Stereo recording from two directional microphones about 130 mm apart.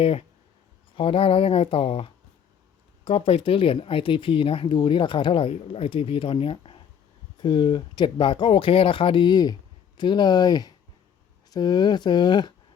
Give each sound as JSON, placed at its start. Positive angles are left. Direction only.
{"t": 0.0, "sound": "speech", "side_deg": 50}